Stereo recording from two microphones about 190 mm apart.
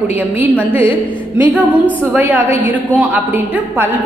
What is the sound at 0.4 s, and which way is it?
A woman's voice, 10° right (ahead or behind).